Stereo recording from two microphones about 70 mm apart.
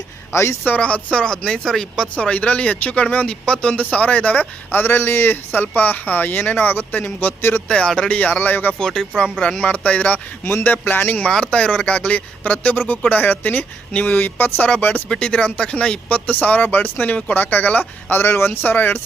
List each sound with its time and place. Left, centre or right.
0.3 s speech: left
0.8 s speech: centre
7.7 s speech: centre
8.8 s speech: centre
10.4 s speech: left
11.2 s speech: centre
15.1 s speech: centre